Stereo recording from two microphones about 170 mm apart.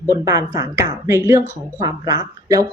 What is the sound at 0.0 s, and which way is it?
Speech, 20° right (ahead or behind).